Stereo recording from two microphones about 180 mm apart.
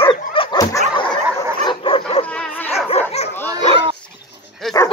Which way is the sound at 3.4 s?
25° right (ahead or behind).